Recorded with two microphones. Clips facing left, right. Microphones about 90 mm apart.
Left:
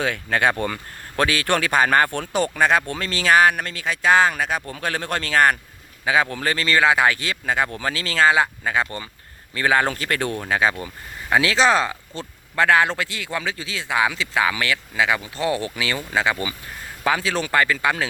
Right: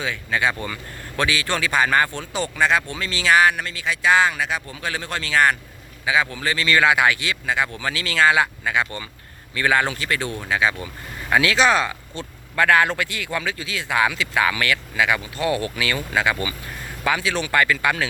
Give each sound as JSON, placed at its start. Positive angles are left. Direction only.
{"t": 0.0, "sound": "speech", "side_deg": 55}
{"t": 11.3, "sound": "speech", "side_deg": 30}